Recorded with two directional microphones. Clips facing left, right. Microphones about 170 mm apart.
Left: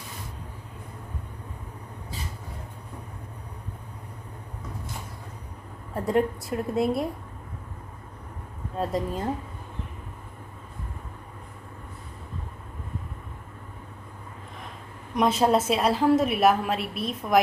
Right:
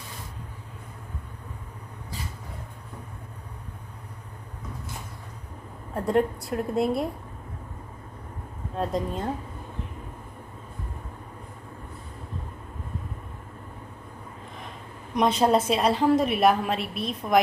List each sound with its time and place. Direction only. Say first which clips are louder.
5.9 s a woman's voice: even; centre (ahead or behind)
8.7 s a woman's voice: even; centre (ahead or behind)
15.1 s a woman's voice: even; 5° left (ahead or behind)